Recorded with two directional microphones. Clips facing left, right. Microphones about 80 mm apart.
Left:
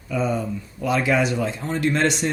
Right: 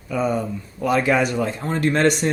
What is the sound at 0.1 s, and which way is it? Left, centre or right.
Speech, right.